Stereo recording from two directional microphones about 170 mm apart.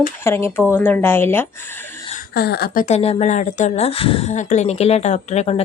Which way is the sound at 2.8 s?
40° left (ahead or behind).